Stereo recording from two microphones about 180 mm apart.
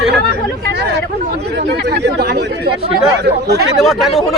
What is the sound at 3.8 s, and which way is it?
Speech, centre (ahead or behind).